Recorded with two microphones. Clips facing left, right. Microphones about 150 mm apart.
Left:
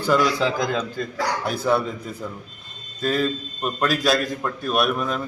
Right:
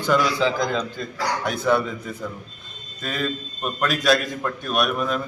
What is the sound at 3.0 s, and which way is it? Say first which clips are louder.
Speech: left 6 dB; 35° left (ahead or behind).